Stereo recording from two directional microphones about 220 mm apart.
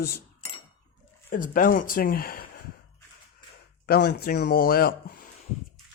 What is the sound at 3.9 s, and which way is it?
Speech, 50° left (ahead or behind).